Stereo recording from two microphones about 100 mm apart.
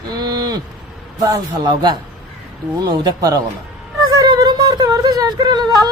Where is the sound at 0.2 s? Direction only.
45° right (ahead or behind).